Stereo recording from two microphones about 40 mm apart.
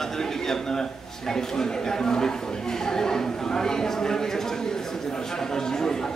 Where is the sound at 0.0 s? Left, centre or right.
Centre.